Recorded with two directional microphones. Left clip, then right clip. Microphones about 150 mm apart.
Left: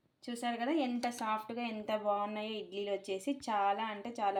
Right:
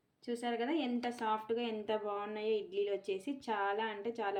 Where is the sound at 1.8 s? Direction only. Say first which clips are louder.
Left 3 dB; 30° left (ahead or behind).